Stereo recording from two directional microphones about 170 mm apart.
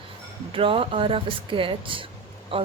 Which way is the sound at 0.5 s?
30° right (ahead or behind).